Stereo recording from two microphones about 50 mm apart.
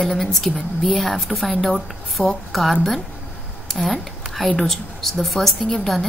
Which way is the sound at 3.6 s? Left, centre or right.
Centre.